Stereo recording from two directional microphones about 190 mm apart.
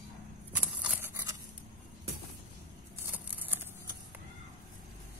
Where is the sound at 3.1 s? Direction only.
10° right (ahead or behind).